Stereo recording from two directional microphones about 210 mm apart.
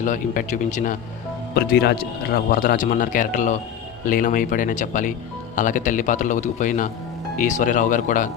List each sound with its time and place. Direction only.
0.0 s speech: 40° left (ahead or behind)
1.5 s speech: 50° left (ahead or behind)